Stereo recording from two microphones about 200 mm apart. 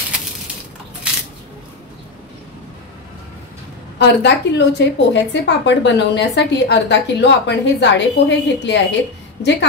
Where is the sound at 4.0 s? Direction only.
55° left (ahead or behind).